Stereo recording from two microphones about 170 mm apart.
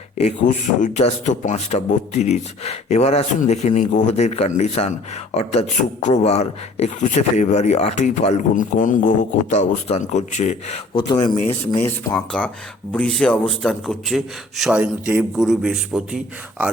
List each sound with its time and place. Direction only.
0.2 s a man's voice: 45° left (ahead or behind)
11.7 s a man's voice: 15° left (ahead or behind); by 16.6 s 5° right (ahead or behind)